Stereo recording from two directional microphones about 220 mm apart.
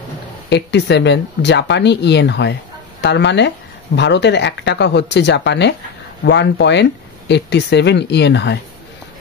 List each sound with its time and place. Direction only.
0.5 s speech: 50° left (ahead or behind)